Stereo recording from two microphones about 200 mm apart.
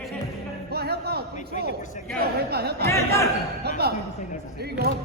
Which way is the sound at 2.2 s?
50° right (ahead or behind).